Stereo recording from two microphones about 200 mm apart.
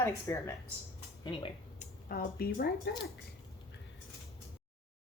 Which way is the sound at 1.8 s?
45° left (ahead or behind).